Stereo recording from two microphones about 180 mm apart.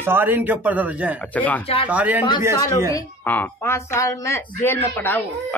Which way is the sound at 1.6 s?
30° left (ahead or behind).